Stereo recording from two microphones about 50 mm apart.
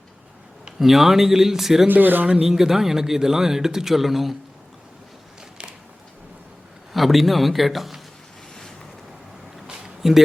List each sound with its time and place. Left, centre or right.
0.8 s speech: centre
1.9 s speech: right
2.2 s speech: right
2.5 s a man's voice: centre
6.9 s a man's voice: centre
9.6 s a sound: centre